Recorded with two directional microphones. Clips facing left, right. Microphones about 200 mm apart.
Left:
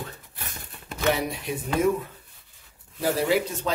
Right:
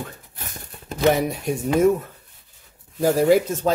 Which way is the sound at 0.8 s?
45° right (ahead or behind).